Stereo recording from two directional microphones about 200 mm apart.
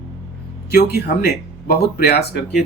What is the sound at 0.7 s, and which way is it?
Speech, 50° left (ahead or behind).